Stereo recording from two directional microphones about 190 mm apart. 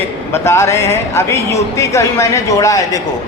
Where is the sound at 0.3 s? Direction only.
15° left (ahead or behind).